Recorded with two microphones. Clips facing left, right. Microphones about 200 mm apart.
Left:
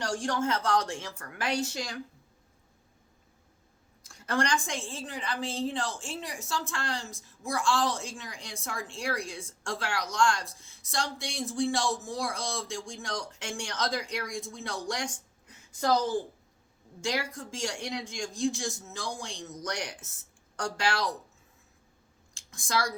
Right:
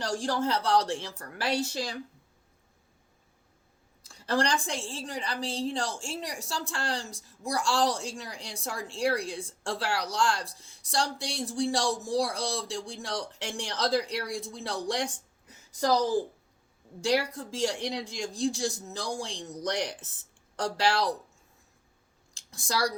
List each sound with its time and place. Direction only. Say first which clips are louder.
0.0 s a woman's voice: right 1 dB; 35° right (ahead or behind)
4.1 s a woman's voice: right 1 dB; 35° right (ahead or behind)
17.0 s a woman's voice: right 5 dB; 35° right (ahead or behind)
22.4 s speech: right 1 dB; 35° right (ahead or behind)